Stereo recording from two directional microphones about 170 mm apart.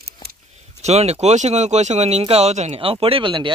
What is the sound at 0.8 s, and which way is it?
Speech, 40° right (ahead or behind).